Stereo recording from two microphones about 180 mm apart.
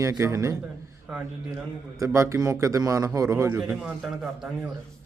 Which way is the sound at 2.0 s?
15° right (ahead or behind).